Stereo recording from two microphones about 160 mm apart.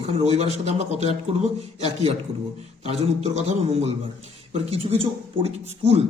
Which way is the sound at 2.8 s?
40° right (ahead or behind).